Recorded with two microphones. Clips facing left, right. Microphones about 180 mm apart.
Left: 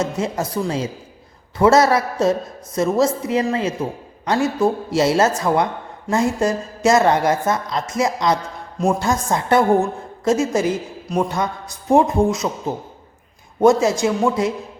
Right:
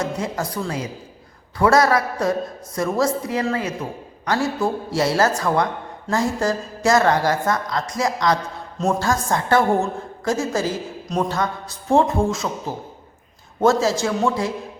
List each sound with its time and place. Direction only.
0.0 s a woman's voice: 25° left (ahead or behind)